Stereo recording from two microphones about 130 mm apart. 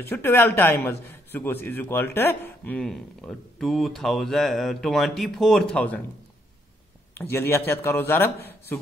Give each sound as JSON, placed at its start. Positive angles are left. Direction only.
{"t": 0.1, "sound": "a man's voice", "side_deg": 15}
{"t": 7.2, "sound": "a man's voice", "side_deg": 15}